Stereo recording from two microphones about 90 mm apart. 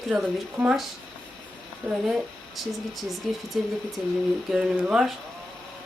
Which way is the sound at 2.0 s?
Centre (ahead or behind).